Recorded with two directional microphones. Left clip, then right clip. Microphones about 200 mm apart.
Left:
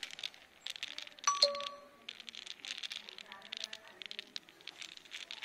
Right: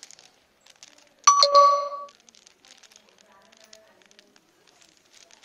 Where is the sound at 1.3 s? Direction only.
55° right (ahead or behind).